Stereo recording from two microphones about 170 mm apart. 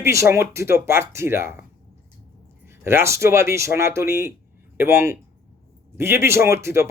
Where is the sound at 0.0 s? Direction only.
15° right (ahead or behind).